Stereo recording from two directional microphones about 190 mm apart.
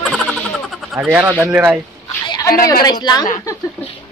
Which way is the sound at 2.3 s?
20° left (ahead or behind).